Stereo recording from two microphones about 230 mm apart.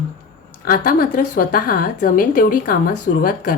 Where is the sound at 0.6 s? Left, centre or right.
Left.